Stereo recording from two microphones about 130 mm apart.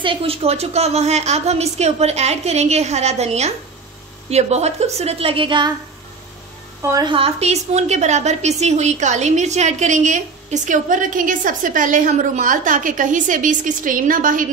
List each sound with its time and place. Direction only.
0.0 s a woman's voice: 45° right (ahead or behind)
6.8 s a woman's voice: 25° right (ahead or behind)
7.1 s a woman's voice: 50° right (ahead or behind); by 14.4 s 90° right